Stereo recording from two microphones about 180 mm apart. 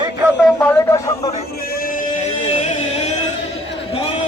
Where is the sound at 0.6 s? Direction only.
15° left (ahead or behind).